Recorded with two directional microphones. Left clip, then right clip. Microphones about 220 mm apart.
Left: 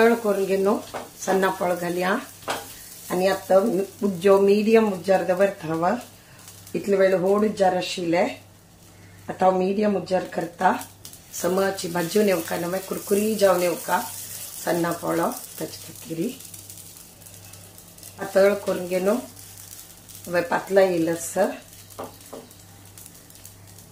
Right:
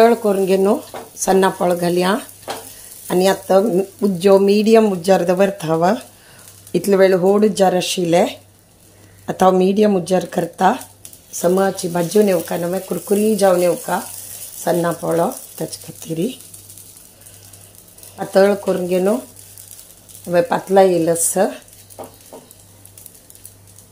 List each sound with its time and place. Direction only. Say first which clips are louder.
0.0 s speech: right 6 dB; 30° right (ahead or behind)
9.2 s speech: right 6 dB; 40° right (ahead or behind)
11.4 s speech: right 7 dB; 30° right (ahead or behind)
18.1 s speech: right 5 dB; 35° right (ahead or behind)
20.2 s speech: right 7 dB; 35° right (ahead or behind)